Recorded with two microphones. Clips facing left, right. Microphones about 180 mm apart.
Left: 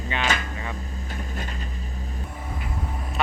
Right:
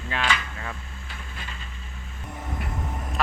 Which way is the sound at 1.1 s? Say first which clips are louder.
Left 7 dB; 40° left (ahead or behind).